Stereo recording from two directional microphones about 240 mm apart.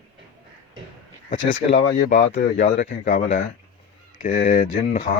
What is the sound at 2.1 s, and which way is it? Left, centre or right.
Speech, left.